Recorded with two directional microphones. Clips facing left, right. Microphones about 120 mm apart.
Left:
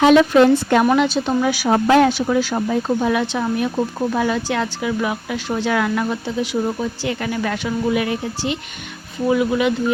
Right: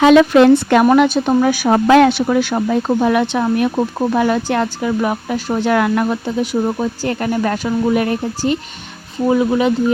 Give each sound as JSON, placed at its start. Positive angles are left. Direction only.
{"t": 0.1, "sound": "a woman's voice", "side_deg": -80}
{"t": 0.9, "sound": "speech", "side_deg": -50}
{"t": 1.7, "sound": "speech", "side_deg": -85}
{"t": 9.3, "sound": "speech", "side_deg": -30}